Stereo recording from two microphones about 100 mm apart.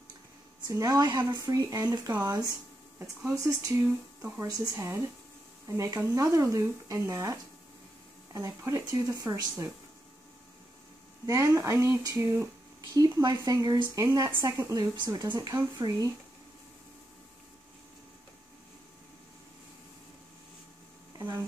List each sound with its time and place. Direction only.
0.7 s speech: 35° right (ahead or behind)
3.8 s speech: 20° right (ahead or behind)
11.2 s speech: 30° right (ahead or behind)
12.9 s speech: 40° right (ahead or behind)
15.5 s speech: 25° right (ahead or behind)